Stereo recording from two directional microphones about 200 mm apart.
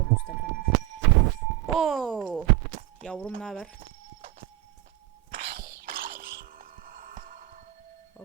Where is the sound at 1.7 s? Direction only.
Centre (ahead or behind).